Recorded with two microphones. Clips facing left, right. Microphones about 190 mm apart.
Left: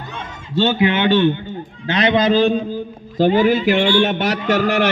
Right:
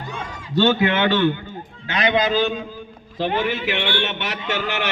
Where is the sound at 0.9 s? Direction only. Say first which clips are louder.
Left 3 dB; 20° left (ahead or behind).